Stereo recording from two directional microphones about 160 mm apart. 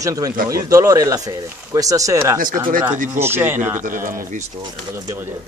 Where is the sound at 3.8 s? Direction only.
60° right (ahead or behind).